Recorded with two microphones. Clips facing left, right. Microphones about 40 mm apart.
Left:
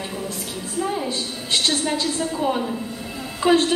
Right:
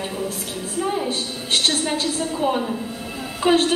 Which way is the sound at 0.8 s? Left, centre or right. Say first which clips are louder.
Right 1 dB; centre.